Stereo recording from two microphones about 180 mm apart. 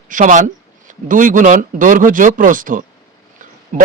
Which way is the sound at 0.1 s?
45° right (ahead or behind).